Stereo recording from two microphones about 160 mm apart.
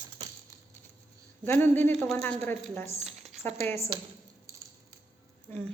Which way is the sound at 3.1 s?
Centre (ahead or behind).